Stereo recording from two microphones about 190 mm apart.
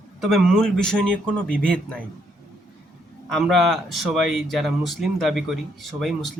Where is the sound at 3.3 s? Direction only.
Centre (ahead or behind).